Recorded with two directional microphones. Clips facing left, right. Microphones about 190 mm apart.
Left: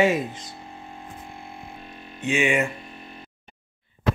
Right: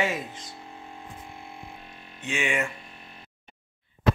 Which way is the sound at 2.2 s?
10° left (ahead or behind).